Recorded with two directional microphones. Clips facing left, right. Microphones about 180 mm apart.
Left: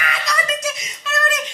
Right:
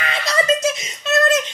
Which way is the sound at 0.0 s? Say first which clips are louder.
Right 4 dB; 25° right (ahead or behind).